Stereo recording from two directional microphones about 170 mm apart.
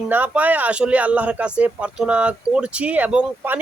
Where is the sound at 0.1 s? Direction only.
10° right (ahead or behind).